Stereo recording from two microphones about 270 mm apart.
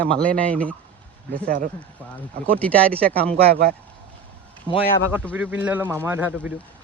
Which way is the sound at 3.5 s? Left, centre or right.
Right.